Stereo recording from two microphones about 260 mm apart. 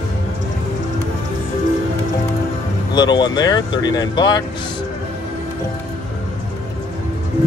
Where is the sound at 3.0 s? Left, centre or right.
Centre.